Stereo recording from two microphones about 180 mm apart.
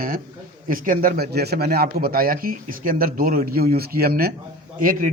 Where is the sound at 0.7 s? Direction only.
50° right (ahead or behind).